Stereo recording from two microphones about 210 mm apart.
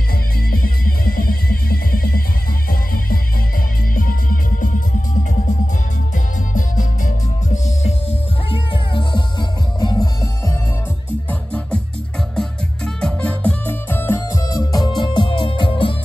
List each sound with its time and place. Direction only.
0.5 s music: 45° left (ahead or behind)
6.1 s music: 35° left (ahead or behind)